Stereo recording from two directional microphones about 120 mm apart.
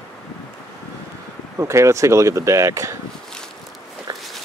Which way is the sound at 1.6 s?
25° right (ahead or behind).